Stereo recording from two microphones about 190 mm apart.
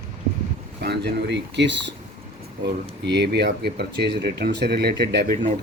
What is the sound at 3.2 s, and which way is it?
Speech, 60° right (ahead or behind).